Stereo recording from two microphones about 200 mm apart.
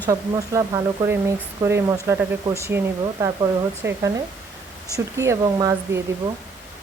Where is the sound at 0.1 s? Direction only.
15° right (ahead or behind).